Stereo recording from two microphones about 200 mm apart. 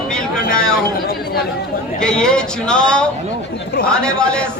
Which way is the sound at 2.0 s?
5° left (ahead or behind).